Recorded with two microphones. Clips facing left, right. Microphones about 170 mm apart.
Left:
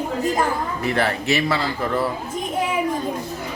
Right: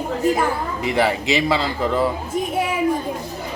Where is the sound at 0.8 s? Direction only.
15° right (ahead or behind).